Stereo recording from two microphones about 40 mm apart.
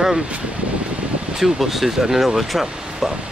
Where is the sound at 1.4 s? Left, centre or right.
Centre.